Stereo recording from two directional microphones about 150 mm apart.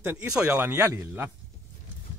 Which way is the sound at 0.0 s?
15° right (ahead or behind).